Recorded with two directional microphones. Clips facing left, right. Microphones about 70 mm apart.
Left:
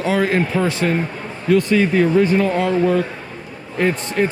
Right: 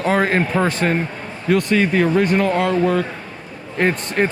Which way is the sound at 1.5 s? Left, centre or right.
Right.